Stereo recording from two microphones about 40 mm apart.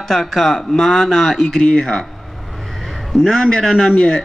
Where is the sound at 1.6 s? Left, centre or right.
Left.